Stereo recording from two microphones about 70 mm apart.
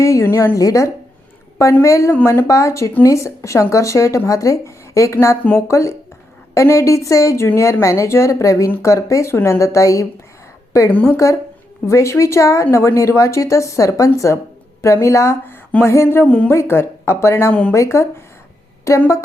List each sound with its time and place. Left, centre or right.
0.0 s speech: left
0.5 s speech: left
7.4 s a woman's voice: left
10.9 s a woman's voice: left
11.9 s speech: left
16.2 s a woman's voice: centre
16.5 s speech: left
17.5 s a woman's voice: left
17.7 s speech: left